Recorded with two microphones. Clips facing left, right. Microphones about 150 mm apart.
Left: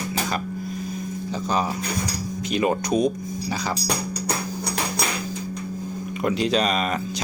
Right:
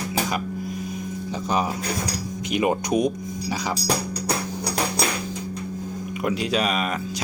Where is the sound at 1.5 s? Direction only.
20° right (ahead or behind).